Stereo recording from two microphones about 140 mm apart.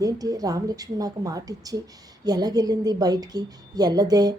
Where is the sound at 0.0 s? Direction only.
25° right (ahead or behind).